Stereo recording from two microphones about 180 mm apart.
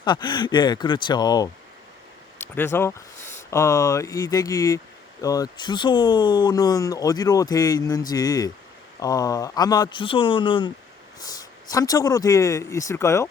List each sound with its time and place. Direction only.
0.0 s speech: 25° left (ahead or behind)
2.4 s speech: 10° left (ahead or behind)